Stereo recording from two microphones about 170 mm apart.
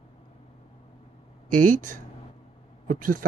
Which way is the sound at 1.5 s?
50° right (ahead or behind).